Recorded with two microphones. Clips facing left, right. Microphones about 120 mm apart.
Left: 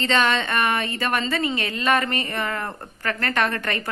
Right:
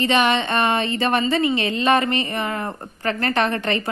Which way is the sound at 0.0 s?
15° right (ahead or behind).